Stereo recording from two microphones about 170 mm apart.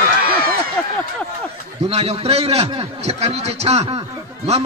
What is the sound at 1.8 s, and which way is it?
A man's voice, 35° right (ahead or behind).